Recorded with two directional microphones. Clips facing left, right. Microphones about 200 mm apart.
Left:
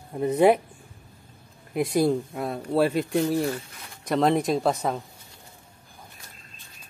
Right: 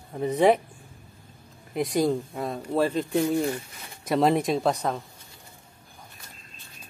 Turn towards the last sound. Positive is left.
turn(degrees=0)  # may be behind; listen again after turning